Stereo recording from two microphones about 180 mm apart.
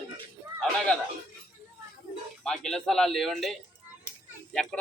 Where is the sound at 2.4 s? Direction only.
5° left (ahead or behind).